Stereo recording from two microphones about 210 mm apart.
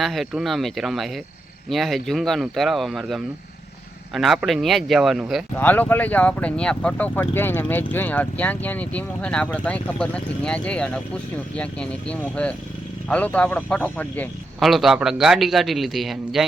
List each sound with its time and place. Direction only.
0.0 s a man's voice: centre (ahead or behind)